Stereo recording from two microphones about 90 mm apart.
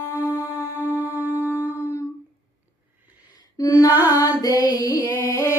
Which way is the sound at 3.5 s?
40° left (ahead or behind).